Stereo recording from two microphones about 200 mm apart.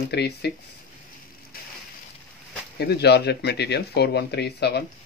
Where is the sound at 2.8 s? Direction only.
55° left (ahead or behind).